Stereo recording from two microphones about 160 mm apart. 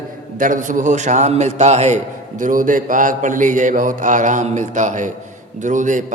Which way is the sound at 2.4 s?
55° right (ahead or behind).